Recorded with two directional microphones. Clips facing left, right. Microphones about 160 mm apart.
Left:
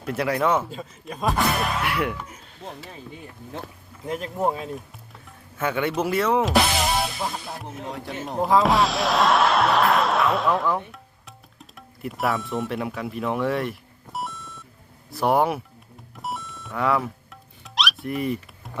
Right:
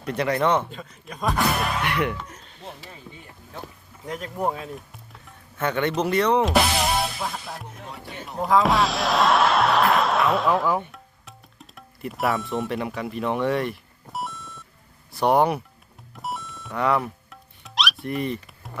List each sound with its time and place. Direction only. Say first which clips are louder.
0.0 s speech: even; 5° left (ahead or behind)
4.0 s speech: left 2 dB; 5° left (ahead or behind)
8.0 s speech: left 6 dB; 90° left
8.5 s speech: even; centre (ahead or behind)
10.9 s music: even; centre (ahead or behind)
15.1 s speech: right 1 dB; centre (ahead or behind)
16.1 s music: even; centre (ahead or behind)